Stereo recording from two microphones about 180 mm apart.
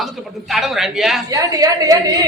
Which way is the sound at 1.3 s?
20° right (ahead or behind).